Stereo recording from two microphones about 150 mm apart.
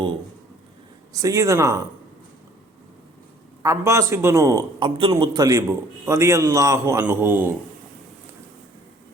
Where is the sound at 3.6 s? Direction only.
20° right (ahead or behind).